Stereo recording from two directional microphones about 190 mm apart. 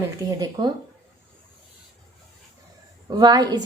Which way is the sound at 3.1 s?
20° right (ahead or behind).